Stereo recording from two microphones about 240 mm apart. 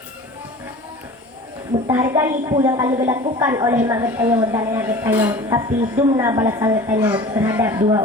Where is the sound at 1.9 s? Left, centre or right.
Centre.